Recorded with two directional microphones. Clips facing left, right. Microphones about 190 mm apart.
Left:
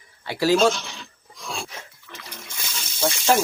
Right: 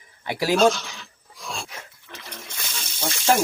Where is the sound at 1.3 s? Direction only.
Centre (ahead or behind).